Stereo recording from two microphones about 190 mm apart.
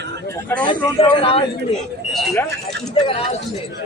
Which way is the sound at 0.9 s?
30° left (ahead or behind).